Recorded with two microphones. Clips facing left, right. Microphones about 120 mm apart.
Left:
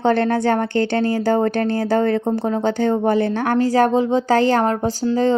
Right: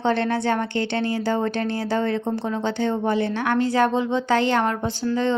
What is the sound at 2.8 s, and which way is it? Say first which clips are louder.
Speech: left 4 dB; 45° left (ahead or behind).